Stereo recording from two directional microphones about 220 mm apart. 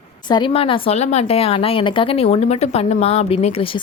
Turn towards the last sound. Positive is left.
turn(degrees=25)  # may be behind; listen again after turning